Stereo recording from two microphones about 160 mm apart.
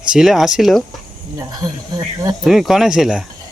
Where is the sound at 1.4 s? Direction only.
20° right (ahead or behind).